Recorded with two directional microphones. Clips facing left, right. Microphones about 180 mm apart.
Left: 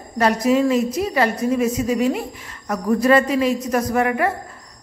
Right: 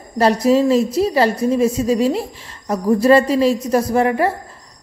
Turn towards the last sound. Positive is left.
turn(degrees=-30)  # may be behind; listen again after turning